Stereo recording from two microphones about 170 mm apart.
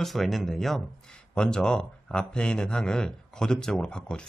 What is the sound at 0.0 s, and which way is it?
Speech, centre (ahead or behind).